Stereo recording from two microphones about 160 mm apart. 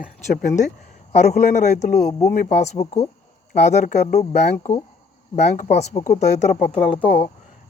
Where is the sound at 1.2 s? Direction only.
45° left (ahead or behind).